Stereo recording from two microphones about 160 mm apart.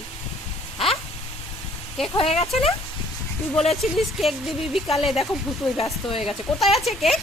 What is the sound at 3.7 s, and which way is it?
Speech, centre (ahead or behind).